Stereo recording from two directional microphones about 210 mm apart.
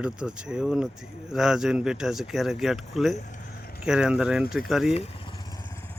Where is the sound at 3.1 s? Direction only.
40° left (ahead or behind).